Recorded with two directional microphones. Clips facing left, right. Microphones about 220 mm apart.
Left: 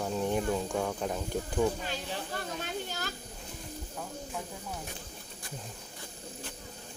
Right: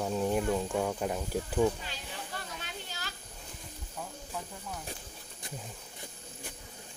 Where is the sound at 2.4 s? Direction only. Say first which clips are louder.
Left 7 dB; 45° left (ahead or behind).